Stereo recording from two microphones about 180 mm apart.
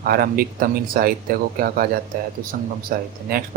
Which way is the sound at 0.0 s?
55° right (ahead or behind).